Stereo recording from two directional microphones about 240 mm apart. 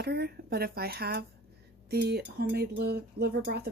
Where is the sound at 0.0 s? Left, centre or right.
Right.